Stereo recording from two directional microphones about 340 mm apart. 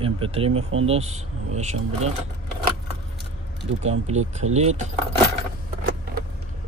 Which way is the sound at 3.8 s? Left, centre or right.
Centre.